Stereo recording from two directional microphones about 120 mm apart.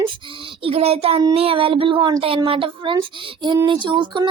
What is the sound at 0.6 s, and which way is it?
Child singing, 55° right (ahead or behind).